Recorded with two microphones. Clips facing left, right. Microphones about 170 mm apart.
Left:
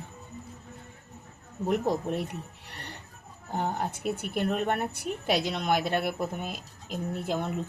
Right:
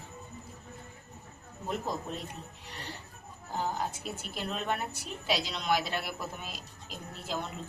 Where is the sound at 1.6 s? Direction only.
70° left (ahead or behind).